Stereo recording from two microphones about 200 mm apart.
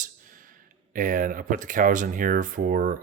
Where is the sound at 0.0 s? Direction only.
40° right (ahead or behind).